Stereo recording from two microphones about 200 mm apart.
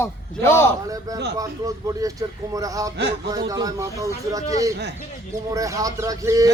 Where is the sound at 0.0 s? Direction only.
15° left (ahead or behind).